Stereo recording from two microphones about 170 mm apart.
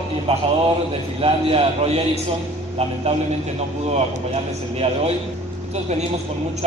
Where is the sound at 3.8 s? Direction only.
40° right (ahead or behind).